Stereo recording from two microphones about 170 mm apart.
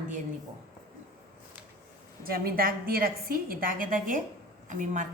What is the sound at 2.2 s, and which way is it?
A woman's voice, 60° right (ahead or behind).